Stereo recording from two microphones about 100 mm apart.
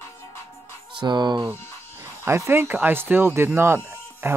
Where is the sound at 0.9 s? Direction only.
50° right (ahead or behind).